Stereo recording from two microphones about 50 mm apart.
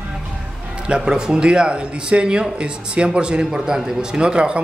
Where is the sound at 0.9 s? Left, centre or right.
Centre.